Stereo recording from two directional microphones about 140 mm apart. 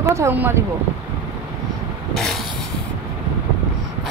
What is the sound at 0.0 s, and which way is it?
Speech, 20° right (ahead or behind).